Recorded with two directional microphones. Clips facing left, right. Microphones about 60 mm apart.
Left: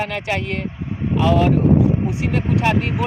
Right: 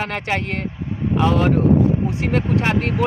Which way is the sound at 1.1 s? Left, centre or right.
Right.